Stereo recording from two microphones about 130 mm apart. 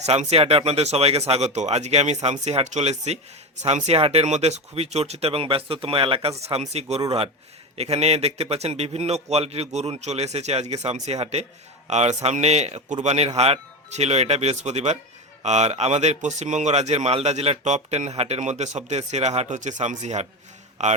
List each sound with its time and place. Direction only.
0.0 s speech: 55° right (ahead or behind)